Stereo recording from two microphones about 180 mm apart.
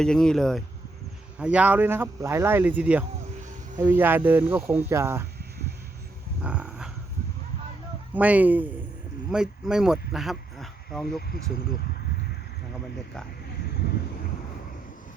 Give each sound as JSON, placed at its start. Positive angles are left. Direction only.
{"t": 0.0, "sound": "speech", "side_deg": 5}
{"t": 6.4, "sound": "wild animals", "side_deg": -5}
{"t": 8.1, "sound": "speech", "side_deg": -10}